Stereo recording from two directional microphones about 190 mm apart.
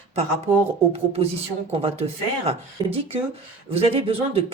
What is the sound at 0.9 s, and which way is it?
Speech, 30° right (ahead or behind).